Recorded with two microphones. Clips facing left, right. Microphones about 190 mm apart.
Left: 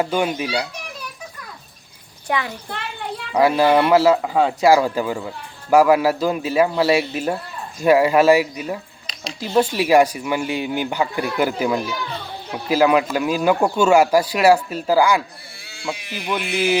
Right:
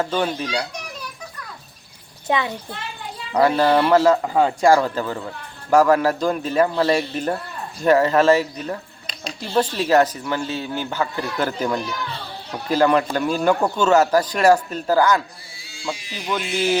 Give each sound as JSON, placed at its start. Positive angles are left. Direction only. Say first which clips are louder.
{"t": 0.0, "sound": "speech", "louder": "left 2 dB", "side_deg": 10}
{"t": 2.2, "sound": "a child's voice", "louder": "right 2 dB", "side_deg": -20}
{"t": 2.6, "sound": "a child's voice", "louder": "left 4 dB", "side_deg": 65}
{"t": 3.3, "sound": "speech", "louder": "left 1 dB", "side_deg": 10}
{"t": 15.5, "sound": "sheep", "louder": "left 1 dB", "side_deg": 60}
{"t": 16.0, "sound": "speech", "louder": "left 2 dB", "side_deg": 60}